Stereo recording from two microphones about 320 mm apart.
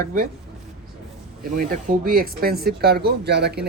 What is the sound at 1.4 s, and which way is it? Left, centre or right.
Speech, right.